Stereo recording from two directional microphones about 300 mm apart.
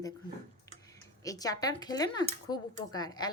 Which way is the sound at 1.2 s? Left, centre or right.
Centre.